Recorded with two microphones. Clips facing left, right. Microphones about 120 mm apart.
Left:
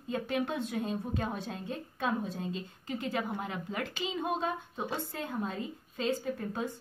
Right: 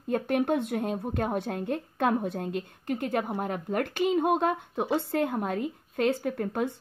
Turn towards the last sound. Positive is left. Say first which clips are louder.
# right 6 dB
turn(degrees=-65)  # may be behind; listen again after turning